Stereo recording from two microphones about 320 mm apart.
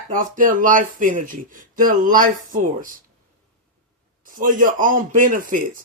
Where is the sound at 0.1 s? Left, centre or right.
Right.